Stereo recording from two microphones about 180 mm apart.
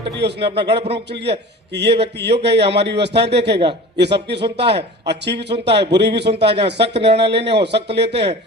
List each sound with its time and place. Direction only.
0.2 s a man's voice: 70° right (ahead or behind)